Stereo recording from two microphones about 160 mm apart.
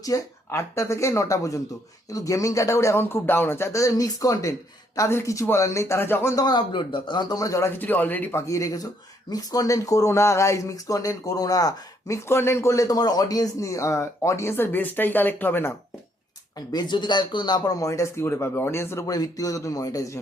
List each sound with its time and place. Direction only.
0.0 s speech: 20° left (ahead or behind)
16.6 s speech: 25° left (ahead or behind)